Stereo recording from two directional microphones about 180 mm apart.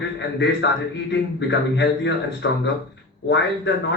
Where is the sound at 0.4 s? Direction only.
75° left (ahead or behind).